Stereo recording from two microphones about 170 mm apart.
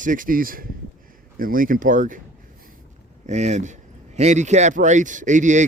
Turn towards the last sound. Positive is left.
turn(degrees=-45)  # may be behind; listen again after turning